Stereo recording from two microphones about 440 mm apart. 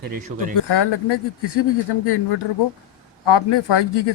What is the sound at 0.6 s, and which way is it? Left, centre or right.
Speech, left.